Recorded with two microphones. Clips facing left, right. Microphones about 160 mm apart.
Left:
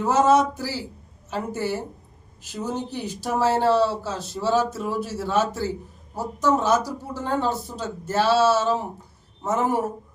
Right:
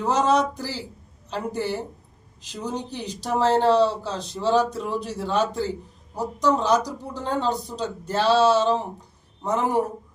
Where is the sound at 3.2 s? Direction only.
10° left (ahead or behind).